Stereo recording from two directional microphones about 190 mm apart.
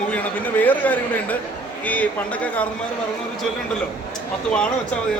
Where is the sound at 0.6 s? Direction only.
10° left (ahead or behind).